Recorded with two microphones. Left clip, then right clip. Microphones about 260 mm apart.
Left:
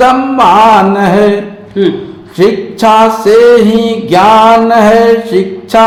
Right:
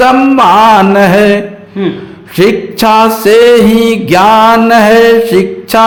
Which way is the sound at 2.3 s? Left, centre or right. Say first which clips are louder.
Right 1 dB; right.